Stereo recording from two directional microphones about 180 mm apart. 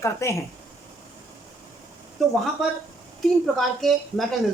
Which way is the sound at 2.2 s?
Centre (ahead or behind).